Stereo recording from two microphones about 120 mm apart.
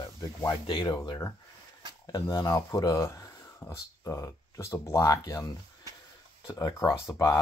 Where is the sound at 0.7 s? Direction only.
35° left (ahead or behind).